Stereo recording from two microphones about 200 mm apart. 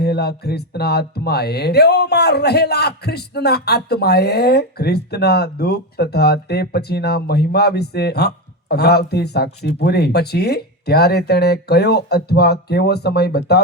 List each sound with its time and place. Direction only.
0.0 s speech: 55° left (ahead or behind)